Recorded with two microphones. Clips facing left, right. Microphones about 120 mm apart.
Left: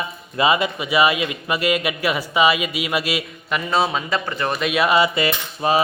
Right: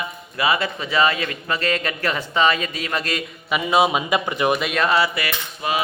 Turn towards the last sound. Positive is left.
turn(degrees=35)  # may be behind; listen again after turning